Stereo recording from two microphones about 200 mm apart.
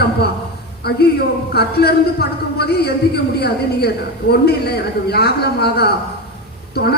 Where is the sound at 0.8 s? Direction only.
50° left (ahead or behind).